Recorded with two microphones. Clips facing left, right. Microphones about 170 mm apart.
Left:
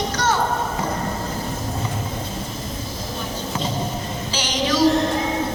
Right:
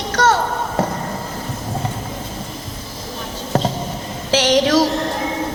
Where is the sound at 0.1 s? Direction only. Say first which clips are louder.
Right 11 dB; 90° right.